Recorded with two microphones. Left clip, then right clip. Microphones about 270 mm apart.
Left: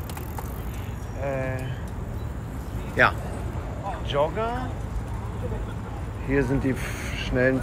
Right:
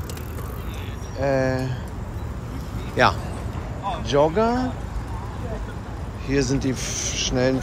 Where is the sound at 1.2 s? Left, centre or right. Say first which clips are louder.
Right 8 dB; centre.